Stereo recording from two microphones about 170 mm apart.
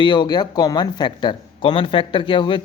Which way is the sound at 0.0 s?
25° left (ahead or behind).